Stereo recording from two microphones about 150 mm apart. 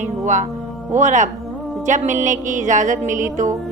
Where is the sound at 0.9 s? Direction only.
55° right (ahead or behind).